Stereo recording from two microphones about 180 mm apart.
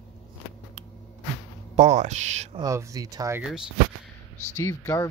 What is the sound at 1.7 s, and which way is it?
Speech, 40° right (ahead or behind).